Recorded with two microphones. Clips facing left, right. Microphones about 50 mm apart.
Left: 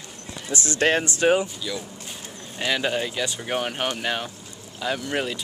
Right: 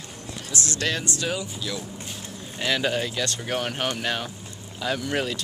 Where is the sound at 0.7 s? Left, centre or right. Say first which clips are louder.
Left 7 dB; left.